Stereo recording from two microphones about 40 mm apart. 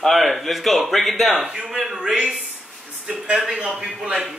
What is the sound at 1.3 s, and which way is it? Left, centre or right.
Speech, right.